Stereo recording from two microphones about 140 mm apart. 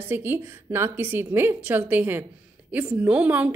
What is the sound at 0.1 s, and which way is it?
Speech, 15° right (ahead or behind).